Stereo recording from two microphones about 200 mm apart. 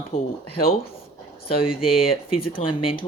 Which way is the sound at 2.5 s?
25° left (ahead or behind).